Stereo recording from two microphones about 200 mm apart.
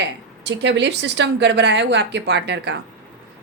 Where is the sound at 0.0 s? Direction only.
60° right (ahead or behind).